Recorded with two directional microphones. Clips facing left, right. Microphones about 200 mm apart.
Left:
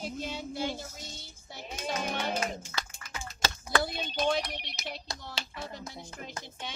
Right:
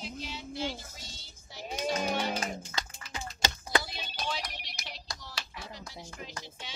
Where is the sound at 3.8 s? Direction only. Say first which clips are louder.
Left 8 dB; 55° left (ahead or behind).